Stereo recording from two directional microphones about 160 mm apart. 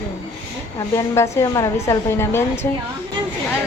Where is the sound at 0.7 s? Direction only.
20° left (ahead or behind).